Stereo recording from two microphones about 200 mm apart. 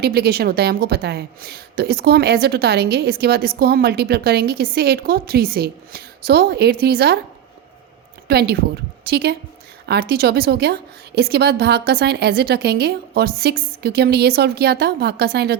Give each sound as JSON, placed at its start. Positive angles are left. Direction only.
{"t": 0.0, "sound": "a woman's voice", "side_deg": -50}
{"t": 8.3, "sound": "a woman's voice", "side_deg": -55}